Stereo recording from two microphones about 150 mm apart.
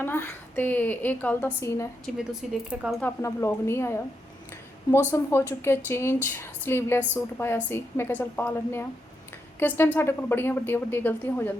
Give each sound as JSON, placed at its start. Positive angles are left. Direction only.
{"t": 0.0, "sound": "a woman's voice", "side_deg": 15}
{"t": 2.1, "sound": "speech", "side_deg": -5}
{"t": 3.0, "sound": "a woman's voice", "side_deg": 20}